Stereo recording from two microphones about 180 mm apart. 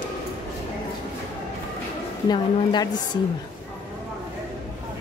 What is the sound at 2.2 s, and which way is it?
Speech, 25° left (ahead or behind).